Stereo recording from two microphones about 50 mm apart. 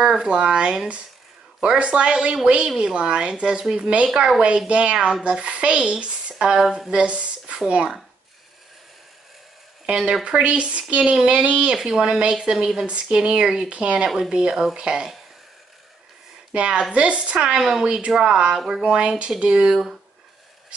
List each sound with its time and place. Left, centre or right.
0.1 s speech: centre
6.3 s a woman's voice: centre
6.9 s speech: right
9.8 s a woman's voice: centre
16.5 s a woman's voice: right
19.7 s speech: centre